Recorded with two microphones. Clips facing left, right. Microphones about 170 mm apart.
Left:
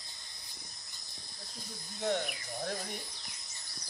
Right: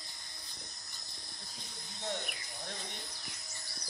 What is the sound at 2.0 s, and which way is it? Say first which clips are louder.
Speech: left 7 dB; 55° left (ahead or behind).